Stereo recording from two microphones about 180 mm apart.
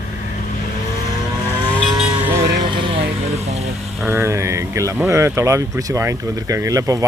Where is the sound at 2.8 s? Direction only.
30° right (ahead or behind).